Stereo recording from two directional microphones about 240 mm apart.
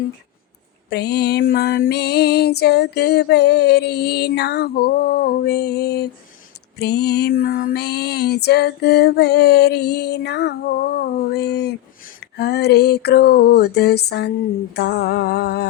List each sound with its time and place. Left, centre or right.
0.9 s music: left